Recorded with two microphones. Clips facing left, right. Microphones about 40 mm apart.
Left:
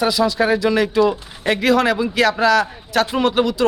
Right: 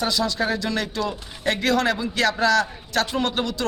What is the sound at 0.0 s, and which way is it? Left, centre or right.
Speech, centre.